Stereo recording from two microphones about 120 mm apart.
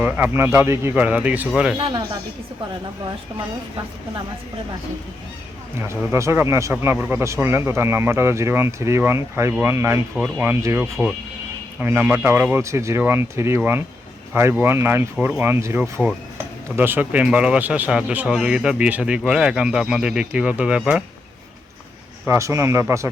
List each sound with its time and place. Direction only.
0.0 s speech: 15° right (ahead or behind)
5.7 s speech: 20° right (ahead or behind)
14.6 s speech: 20° right (ahead or behind)
22.3 s speech: 25° right (ahead or behind)